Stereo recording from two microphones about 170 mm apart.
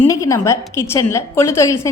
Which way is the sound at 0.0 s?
20° left (ahead or behind).